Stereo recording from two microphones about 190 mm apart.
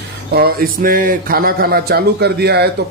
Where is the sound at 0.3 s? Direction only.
55° right (ahead or behind).